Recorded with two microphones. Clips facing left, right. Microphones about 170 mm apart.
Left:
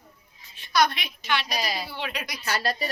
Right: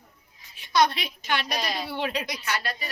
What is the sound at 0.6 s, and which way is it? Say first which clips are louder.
Speech: right 1 dB; 25° right (ahead or behind).